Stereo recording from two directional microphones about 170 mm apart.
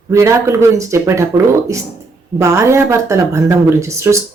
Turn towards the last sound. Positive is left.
turn(degrees=-15)  # may be behind; listen again after turning